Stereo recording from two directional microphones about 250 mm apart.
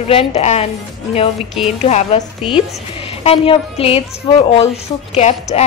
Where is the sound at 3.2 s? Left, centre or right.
Left.